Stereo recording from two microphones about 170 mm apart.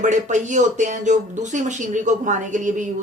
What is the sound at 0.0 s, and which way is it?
Speech, 45° right (ahead or behind).